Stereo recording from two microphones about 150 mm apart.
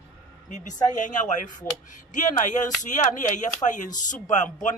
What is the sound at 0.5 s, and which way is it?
A man's voice, 55° left (ahead or behind).